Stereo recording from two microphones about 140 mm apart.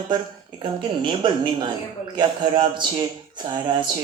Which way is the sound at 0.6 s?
35° right (ahead or behind).